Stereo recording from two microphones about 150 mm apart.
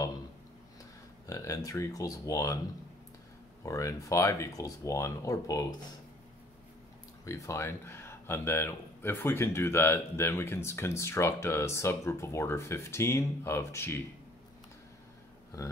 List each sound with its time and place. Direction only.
1.2 s speech: 20° left (ahead or behind)
3.6 s speech: 20° left (ahead or behind)
7.2 s speech: 20° left (ahead or behind)